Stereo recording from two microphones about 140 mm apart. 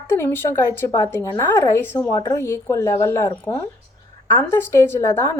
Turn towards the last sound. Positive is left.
turn(degrees=20)  # may be behind; listen again after turning